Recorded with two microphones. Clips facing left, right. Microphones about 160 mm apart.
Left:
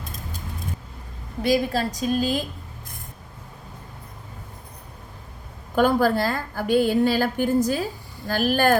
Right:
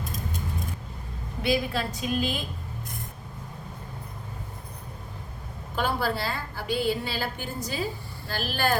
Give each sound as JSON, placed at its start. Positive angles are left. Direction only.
{"t": 1.4, "sound": "a woman's voice", "side_deg": 40}
{"t": 5.7, "sound": "a woman's voice", "side_deg": 45}